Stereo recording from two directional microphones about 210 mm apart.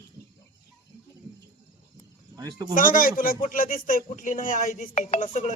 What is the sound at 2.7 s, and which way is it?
A man's voice, 40° left (ahead or behind).